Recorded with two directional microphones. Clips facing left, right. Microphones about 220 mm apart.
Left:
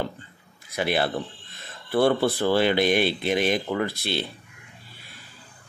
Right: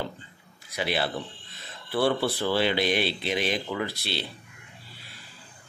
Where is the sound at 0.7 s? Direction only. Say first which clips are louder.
Left 4 dB; 50° left (ahead or behind).